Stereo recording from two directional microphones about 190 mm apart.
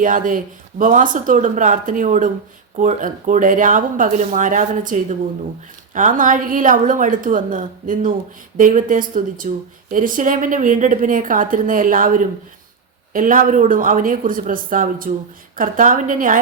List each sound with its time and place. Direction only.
0.0 s speech: 45° right (ahead or behind)